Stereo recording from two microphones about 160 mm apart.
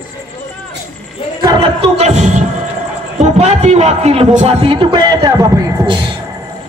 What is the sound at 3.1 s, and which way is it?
A man's voice, 45° right (ahead or behind).